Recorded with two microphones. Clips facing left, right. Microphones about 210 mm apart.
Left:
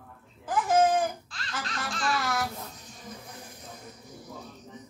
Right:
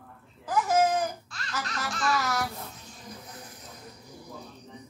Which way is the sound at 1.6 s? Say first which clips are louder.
Right 1 dB; 30° left (ahead or behind).